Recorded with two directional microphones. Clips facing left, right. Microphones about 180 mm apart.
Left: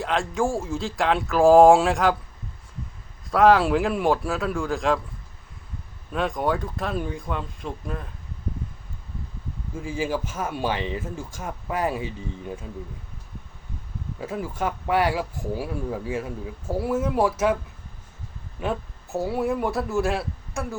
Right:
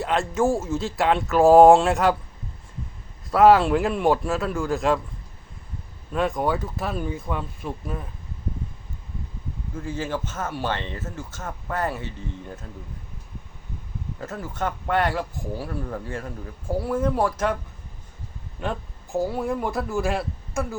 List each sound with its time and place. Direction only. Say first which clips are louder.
0.0 s speech: right 2 dB; centre (ahead or behind)
3.3 s speech: right 2 dB; centre (ahead or behind)
6.1 s speech: right 1 dB; centre (ahead or behind)
9.7 s speech: left 2 dB; 10° left (ahead or behind)
14.2 s speech: left 2 dB; 10° left (ahead or behind)
18.6 s speech: left 2 dB; 5° left (ahead or behind)